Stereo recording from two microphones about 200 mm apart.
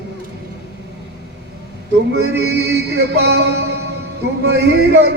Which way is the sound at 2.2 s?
60° right (ahead or behind).